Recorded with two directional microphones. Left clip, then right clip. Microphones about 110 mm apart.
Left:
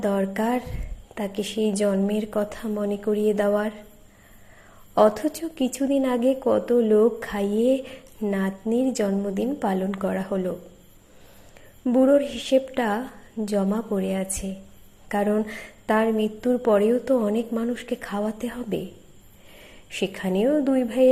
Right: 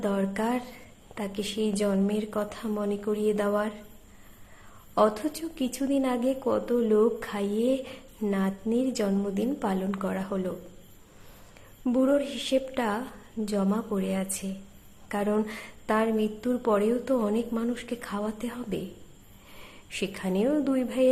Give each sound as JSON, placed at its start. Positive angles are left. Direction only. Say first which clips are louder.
{"t": 0.0, "sound": "a woman's voice", "louder": "left 4 dB", "side_deg": 25}
{"t": 4.9, "sound": "a woman's voice", "louder": "left 5 dB", "side_deg": 30}
{"t": 11.9, "sound": "a woman's voice", "louder": "left 6 dB", "side_deg": 25}
{"t": 19.9, "sound": "a woman's voice", "louder": "left 5 dB", "side_deg": 25}